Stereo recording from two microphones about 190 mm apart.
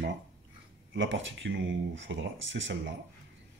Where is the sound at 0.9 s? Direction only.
75° right (ahead or behind).